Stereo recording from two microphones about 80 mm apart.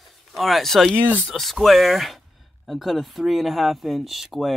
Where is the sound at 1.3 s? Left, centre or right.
Centre.